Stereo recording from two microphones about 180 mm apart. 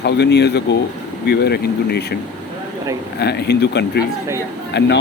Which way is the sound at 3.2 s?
65° left (ahead or behind).